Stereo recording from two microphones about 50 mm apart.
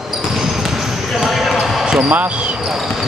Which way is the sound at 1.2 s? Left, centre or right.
Centre.